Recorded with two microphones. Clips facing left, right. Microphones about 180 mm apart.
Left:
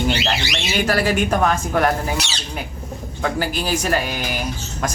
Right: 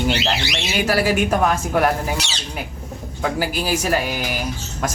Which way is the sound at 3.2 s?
5° right (ahead or behind).